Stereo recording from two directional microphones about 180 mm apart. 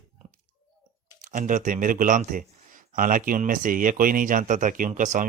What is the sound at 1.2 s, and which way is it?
Speech, 45° right (ahead or behind).